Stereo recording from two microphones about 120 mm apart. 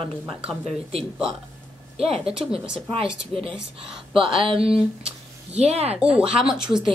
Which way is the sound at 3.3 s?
50° right (ahead or behind).